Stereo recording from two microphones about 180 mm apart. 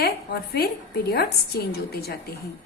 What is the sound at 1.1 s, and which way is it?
A woman's voice, 60° left (ahead or behind).